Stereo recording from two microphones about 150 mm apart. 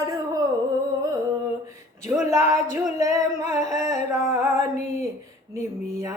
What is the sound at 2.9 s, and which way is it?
Singing, 20° right (ahead or behind).